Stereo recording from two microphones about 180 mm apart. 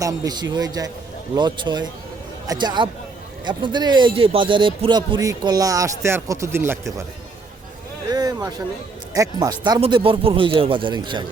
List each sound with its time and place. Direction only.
0.0 s a man's voice: 20° right (ahead or behind)
8.1 s a sound: 20° right (ahead or behind)
9.1 s a man's voice: 20° right (ahead or behind)